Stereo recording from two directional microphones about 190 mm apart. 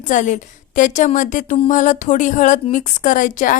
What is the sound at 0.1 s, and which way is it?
A woman's voice, 40° left (ahead or behind).